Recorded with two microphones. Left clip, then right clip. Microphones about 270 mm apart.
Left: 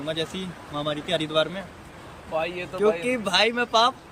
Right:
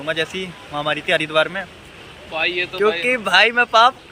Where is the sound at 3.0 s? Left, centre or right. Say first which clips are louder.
Right 7 dB; centre.